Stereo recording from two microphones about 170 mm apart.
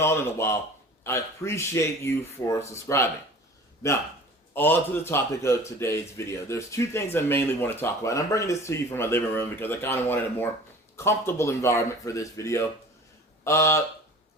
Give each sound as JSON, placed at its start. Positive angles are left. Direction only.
{"t": 0.0, "sound": "speech", "side_deg": 15}